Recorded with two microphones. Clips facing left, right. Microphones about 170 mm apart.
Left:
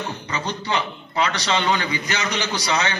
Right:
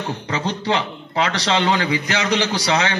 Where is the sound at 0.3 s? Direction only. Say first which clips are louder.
Right 4 dB; 90° right.